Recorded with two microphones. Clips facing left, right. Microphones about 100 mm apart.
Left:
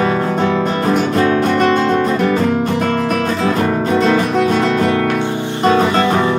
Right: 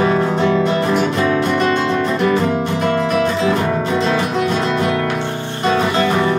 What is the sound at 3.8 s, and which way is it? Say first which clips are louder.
Music: left 3 dB; 40° left (ahead or behind).